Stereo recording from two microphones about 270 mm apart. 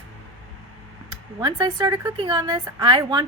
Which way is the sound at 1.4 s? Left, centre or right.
Centre.